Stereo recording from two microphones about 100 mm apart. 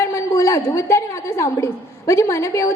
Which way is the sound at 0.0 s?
30° left (ahead or behind).